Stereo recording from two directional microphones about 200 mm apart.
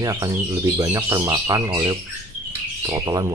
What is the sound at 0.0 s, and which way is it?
Speech, 15° right (ahead or behind).